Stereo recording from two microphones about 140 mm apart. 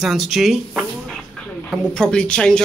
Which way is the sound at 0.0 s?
Centre (ahead or behind).